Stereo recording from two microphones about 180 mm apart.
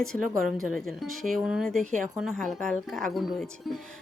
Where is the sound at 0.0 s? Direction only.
Centre (ahead or behind).